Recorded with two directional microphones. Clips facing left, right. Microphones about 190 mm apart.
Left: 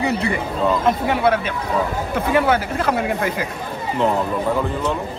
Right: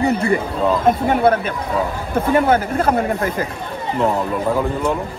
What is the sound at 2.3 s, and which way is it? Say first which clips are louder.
Speech: right 2 dB; 50° right (ahead or behind).